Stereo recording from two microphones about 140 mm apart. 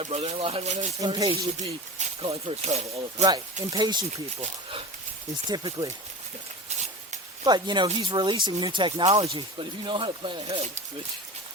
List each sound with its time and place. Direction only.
0.0 s speech: 50° right (ahead or behind)
0.7 s speech: 55° right (ahead or behind)
1.0 s speech: 30° right (ahead or behind)
1.5 s speech: 50° right (ahead or behind)
3.7 s speech: 30° right (ahead or behind)
5.5 s speech: 30° right (ahead or behind)
6.7 s a sound: 55° right (ahead or behind)
7.4 s speech: 30° right (ahead or behind)